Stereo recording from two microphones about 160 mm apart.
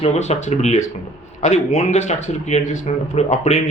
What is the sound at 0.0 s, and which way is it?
Speech, 45° left (ahead or behind).